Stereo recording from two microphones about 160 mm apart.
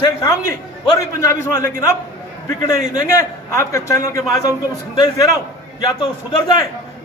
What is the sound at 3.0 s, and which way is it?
A man's voice, 20° left (ahead or behind).